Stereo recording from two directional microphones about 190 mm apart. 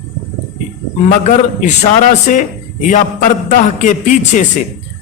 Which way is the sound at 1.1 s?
40° left (ahead or behind).